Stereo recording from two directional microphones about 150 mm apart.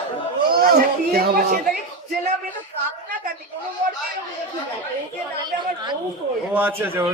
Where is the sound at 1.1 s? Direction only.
85° right.